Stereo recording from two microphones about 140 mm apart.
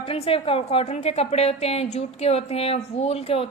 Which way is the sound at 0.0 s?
40° left (ahead or behind).